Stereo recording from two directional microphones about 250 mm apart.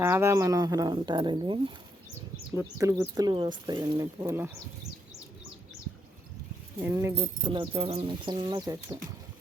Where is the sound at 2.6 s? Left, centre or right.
Centre.